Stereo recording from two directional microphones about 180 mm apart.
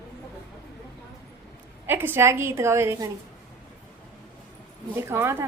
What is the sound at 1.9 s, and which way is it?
A woman's voice, 10° right (ahead or behind).